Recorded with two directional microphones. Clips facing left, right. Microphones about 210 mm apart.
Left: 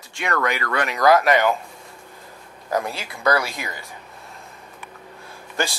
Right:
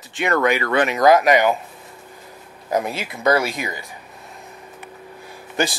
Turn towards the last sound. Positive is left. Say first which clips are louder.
# right 4 dB
turn(degrees=-20)  # may be behind; listen again after turning